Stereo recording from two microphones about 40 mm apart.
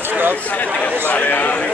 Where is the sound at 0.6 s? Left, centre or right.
Left.